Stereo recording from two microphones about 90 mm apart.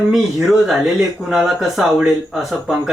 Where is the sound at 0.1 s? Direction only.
5° right (ahead or behind).